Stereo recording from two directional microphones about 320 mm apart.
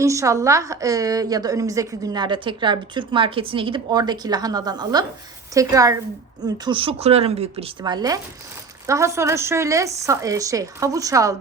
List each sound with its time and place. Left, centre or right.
0.0 s a woman's voice: centre